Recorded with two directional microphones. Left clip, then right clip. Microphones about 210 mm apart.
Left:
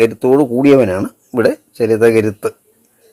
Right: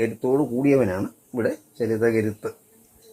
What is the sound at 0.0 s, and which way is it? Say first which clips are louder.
Speech: left 11 dB; 30° left (ahead or behind).